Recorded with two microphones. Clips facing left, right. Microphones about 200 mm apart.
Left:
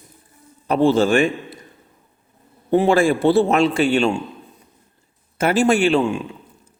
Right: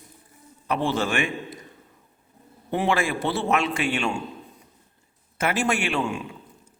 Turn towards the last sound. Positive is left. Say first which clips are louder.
# left 9 dB
turn(degrees=30)  # may be behind; listen again after turning